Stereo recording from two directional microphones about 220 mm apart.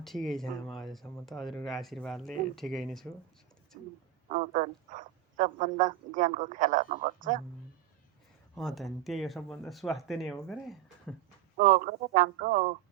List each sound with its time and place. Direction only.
0.0 s speech: centre (ahead or behind)
4.4 s speech: 35° right (ahead or behind)
8.5 s speech: centre (ahead or behind)
11.5 s speech: 35° right (ahead or behind)